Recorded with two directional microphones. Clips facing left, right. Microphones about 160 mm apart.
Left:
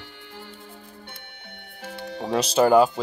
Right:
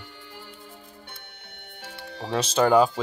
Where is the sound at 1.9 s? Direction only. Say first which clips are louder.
Left 5 dB; 20° left (ahead or behind).